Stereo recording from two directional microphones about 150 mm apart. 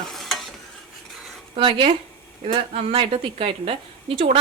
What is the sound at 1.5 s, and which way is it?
Speech, 35° right (ahead or behind).